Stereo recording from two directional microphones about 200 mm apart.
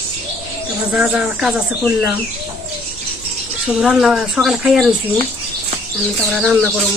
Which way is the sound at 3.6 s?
5° right (ahead or behind).